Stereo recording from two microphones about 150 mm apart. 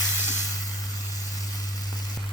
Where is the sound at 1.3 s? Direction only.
25° left (ahead or behind).